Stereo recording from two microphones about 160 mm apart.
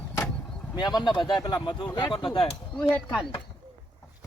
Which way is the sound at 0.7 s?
25° left (ahead or behind).